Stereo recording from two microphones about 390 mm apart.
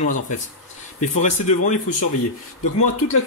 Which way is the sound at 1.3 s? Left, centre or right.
Centre.